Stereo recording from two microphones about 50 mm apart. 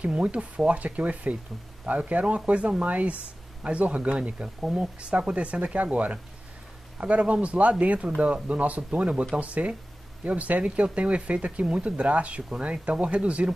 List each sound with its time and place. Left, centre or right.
0.0 s speech: right